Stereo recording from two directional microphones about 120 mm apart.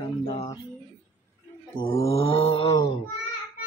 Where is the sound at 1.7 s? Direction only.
50° left (ahead or behind).